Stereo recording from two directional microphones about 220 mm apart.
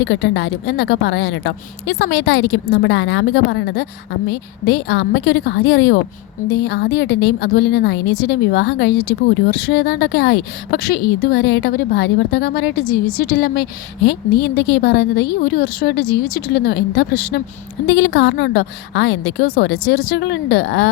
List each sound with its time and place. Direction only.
0.0 s speech: 50° left (ahead or behind)